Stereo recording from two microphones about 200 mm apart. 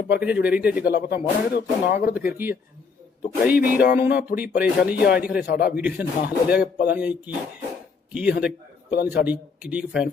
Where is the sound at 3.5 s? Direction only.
50° left (ahead or behind).